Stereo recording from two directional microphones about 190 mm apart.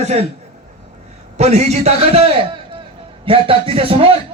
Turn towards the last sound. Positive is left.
turn(degrees=-30)  # may be behind; listen again after turning